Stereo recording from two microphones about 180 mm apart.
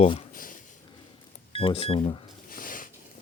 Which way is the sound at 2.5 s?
50° left (ahead or behind).